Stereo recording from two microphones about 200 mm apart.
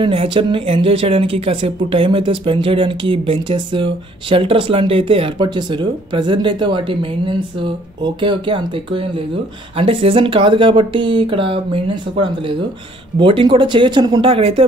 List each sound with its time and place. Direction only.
0.0 s speech: 25° right (ahead or behind)